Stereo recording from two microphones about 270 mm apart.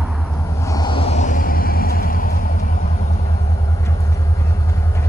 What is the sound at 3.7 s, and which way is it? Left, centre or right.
Vehicle, centre.